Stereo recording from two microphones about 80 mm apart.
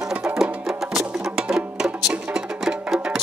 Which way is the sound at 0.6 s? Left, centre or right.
Centre.